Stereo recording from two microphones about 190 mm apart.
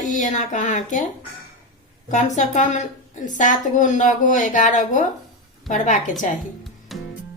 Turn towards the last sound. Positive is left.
turn(degrees=0)  # may be behind; listen again after turning